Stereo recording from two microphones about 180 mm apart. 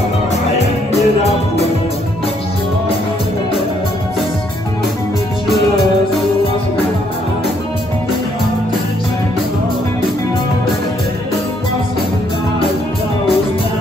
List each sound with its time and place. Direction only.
0.9 s music: 35° left (ahead or behind)